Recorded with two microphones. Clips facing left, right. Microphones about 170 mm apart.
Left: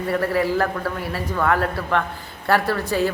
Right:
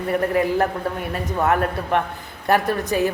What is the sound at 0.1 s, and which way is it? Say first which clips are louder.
A woman's voice: right 1 dB; 20° right (ahead or behind).